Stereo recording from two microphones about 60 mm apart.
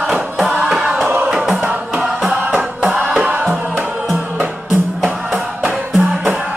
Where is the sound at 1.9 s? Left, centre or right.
Centre.